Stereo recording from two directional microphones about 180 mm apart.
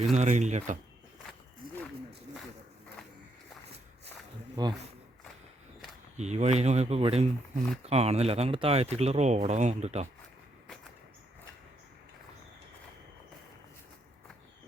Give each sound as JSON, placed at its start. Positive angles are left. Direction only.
{"t": 0.1, "sound": "speech", "side_deg": -40}
{"t": 6.1, "sound": "speech", "side_deg": -40}